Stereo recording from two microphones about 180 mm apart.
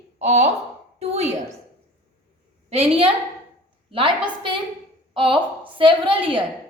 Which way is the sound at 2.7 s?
35° right (ahead or behind).